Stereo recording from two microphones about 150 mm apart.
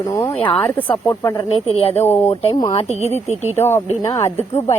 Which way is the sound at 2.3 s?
40° left (ahead or behind).